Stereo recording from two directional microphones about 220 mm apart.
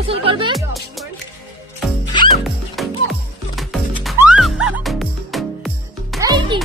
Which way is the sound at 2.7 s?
Centre (ahead or behind).